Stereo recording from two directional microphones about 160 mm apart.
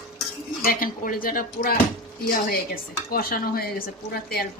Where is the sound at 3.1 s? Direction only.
70° left (ahead or behind).